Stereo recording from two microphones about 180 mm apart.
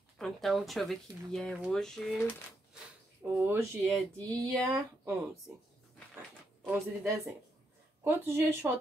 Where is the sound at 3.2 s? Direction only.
10° right (ahead or behind).